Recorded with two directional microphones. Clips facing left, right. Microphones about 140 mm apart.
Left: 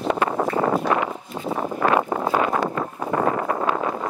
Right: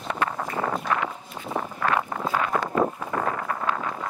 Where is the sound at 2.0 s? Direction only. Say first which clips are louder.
Left 5 dB; 25° left (ahead or behind).